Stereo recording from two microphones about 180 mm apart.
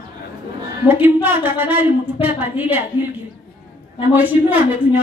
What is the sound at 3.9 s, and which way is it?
A woman's voice, 10° right (ahead or behind).